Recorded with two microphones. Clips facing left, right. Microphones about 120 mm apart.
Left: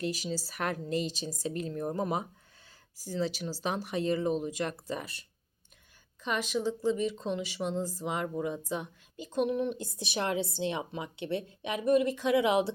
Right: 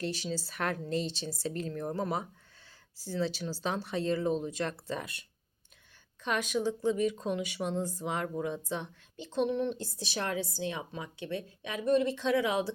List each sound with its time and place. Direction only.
0.0 s speech: 10° left (ahead or behind)
6.2 s speech: centre (ahead or behind); by 12.7 s 20° left (ahead or behind)